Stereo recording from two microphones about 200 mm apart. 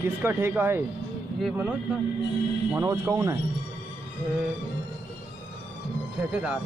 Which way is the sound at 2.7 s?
15° right (ahead or behind).